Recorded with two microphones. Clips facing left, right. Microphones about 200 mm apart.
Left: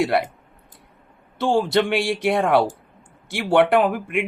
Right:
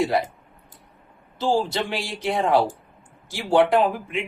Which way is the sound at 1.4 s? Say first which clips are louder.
Left 4 dB; 70° left (ahead or behind).